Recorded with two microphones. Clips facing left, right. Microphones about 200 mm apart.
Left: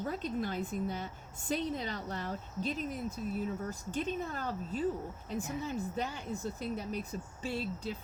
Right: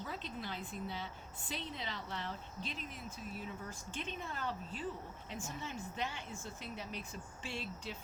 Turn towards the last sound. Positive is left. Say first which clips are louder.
# left 7 dB
turn(degrees=40)  # may be behind; listen again after turning